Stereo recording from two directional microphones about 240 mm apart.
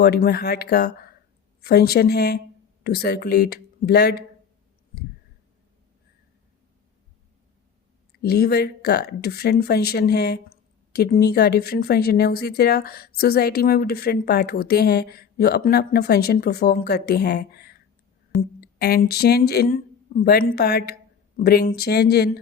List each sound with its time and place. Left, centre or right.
0.0 s speech: left
8.2 s speech: left